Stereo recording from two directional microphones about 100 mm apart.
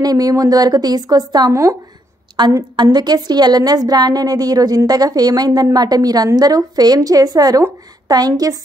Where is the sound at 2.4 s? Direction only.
50° right (ahead or behind).